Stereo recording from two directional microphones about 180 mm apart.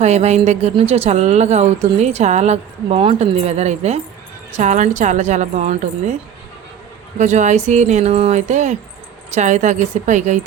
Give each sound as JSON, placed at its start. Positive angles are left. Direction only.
{"t": 0.0, "sound": "speech", "side_deg": -40}
{"t": 7.2, "sound": "speech", "side_deg": -40}